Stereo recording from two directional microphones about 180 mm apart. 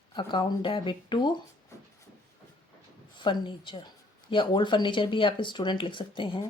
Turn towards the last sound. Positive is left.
turn(degrees=25)  # may be behind; listen again after turning